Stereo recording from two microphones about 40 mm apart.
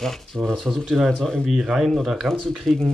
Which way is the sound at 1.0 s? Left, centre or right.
Centre.